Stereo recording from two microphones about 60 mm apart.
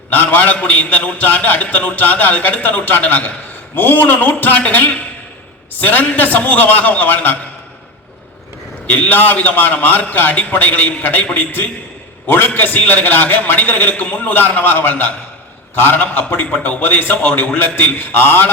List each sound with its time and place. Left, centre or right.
0.1 s a man's voice: left
8.9 s a man's voice: left